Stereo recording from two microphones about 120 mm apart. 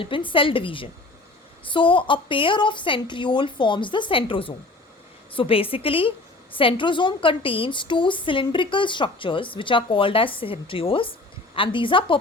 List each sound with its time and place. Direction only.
0.0 s a woman's voice: 45° left (ahead or behind)